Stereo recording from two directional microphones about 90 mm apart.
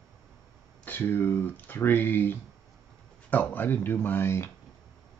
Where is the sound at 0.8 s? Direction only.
20° left (ahead or behind).